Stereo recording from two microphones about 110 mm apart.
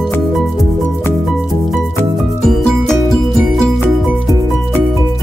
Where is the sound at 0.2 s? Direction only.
Centre (ahead or behind).